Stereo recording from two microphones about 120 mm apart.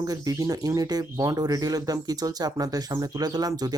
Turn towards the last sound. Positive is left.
turn(degrees=-35)  # may be behind; listen again after turning